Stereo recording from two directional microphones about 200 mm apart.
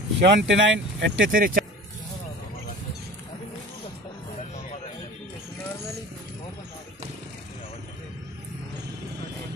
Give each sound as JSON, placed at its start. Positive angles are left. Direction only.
{"t": 0.2, "sound": "speech", "side_deg": -60}
{"t": 1.3, "sound": "speech", "side_deg": -45}